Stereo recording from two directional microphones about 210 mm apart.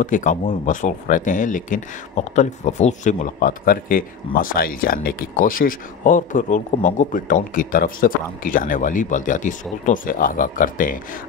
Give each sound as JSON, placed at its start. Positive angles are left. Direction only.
{"t": 0.0, "sound": "speech", "side_deg": 40}